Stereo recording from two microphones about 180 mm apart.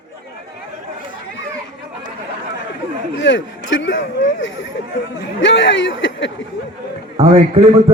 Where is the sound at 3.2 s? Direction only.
90° left.